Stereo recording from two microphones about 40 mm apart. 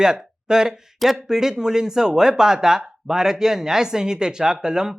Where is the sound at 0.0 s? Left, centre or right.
Centre.